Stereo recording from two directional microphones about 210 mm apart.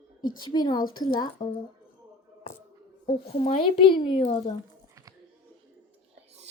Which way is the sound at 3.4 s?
25° left (ahead or behind).